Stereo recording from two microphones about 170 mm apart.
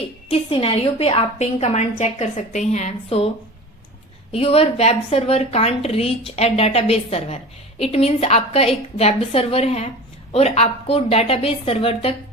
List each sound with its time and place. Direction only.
0.3 s a woman's voice: 35° left (ahead or behind)
4.3 s a woman's voice: 35° left (ahead or behind)